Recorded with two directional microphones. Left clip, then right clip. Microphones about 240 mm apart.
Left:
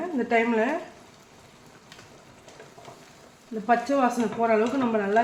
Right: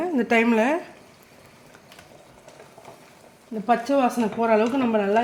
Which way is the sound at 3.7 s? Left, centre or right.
Right.